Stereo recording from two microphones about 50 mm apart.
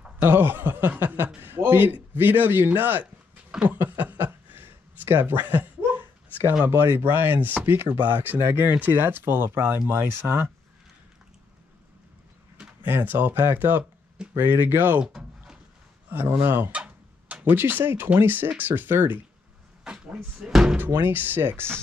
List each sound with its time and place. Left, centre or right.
0.2 s speech: right
3.7 s a sound: right
6.7 s speech: right
7.6 s speech: right
8.0 s speech: right
8.4 s speech: right
12.8 s speech: right
15.1 s a sound: centre
16.1 s speech: right
16.7 s a sound: right
17.5 s speech: right
19.9 s a sound: centre
20.3 s speech: centre
20.7 s speech: right